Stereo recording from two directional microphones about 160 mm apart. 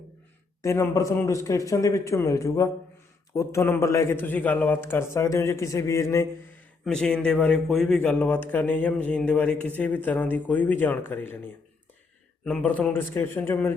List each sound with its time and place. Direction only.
0.6 s a man's voice: 20° left (ahead or behind)
6.8 s speech: 5° left (ahead or behind)
12.5 s speech: 10° left (ahead or behind)